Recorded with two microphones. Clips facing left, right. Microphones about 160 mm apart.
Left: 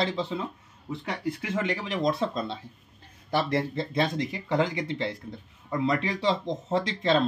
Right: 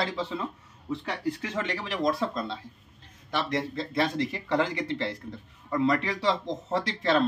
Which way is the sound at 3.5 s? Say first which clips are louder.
Left 2 dB; 30° left (ahead or behind).